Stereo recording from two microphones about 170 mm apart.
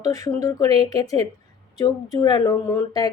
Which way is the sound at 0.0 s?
20° left (ahead or behind).